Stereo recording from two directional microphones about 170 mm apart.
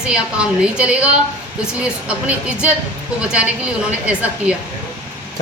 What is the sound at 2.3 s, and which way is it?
Speech, 5° right (ahead or behind).